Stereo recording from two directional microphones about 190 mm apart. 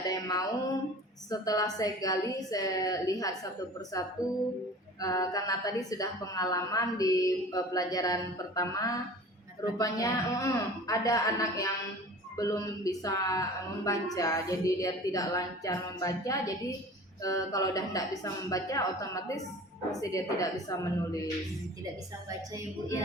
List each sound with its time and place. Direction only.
0.1 s music: 20° left (ahead or behind)
1.3 s a woman's voice: 20° left (ahead or behind)